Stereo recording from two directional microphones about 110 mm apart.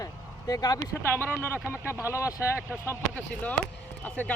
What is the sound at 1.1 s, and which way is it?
Speech, 15° left (ahead or behind).